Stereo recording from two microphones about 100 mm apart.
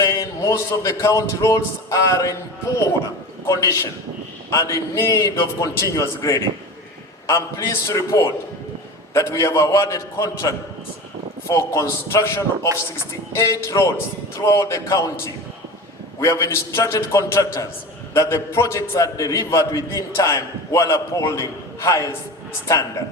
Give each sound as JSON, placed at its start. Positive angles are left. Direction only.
{"t": 0.0, "sound": "a man's voice", "side_deg": 35}
{"t": 3.4, "sound": "a man's voice", "side_deg": 30}